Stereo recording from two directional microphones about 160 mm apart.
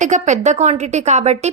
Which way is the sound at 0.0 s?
50° right (ahead or behind).